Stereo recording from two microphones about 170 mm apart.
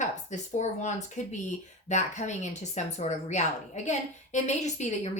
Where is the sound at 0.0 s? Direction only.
45° left (ahead or behind).